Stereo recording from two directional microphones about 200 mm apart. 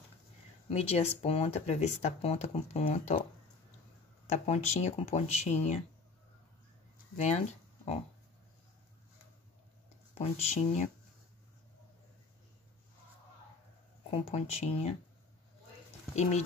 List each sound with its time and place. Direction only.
0.7 s speech: 30° left (ahead or behind)
4.3 s speech: 35° left (ahead or behind)
7.2 s speech: 35° left (ahead or behind)
10.1 s speech: 30° left (ahead or behind)
14.1 s speech: 30° left (ahead or behind)
16.2 s speech: 35° left (ahead or behind)